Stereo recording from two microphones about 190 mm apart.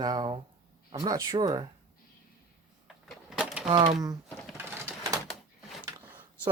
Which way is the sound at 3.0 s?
Centre (ahead or behind).